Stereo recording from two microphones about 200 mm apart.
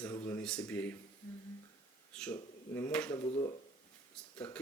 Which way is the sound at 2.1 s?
5° left (ahead or behind).